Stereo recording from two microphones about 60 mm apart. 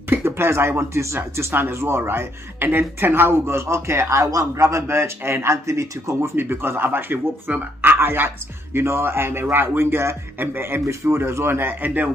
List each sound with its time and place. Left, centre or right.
0.1 s speech: right
6.3 s a man's voice: right
11.1 s speech: right